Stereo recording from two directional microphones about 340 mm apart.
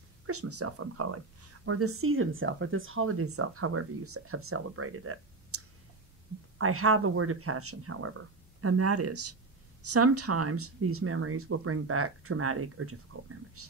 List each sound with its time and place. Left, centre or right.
0.3 s speech: right
6.6 s speech: right